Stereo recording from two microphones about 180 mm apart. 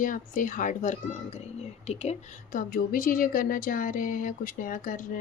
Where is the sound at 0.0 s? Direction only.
50° left (ahead or behind).